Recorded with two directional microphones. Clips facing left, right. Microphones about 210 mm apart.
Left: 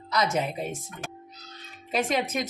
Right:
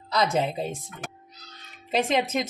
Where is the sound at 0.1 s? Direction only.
30° right (ahead or behind).